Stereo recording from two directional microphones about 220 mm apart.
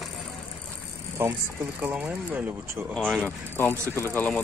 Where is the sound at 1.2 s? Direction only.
10° right (ahead or behind).